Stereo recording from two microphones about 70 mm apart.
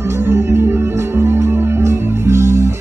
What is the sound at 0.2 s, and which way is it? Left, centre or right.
Music, right.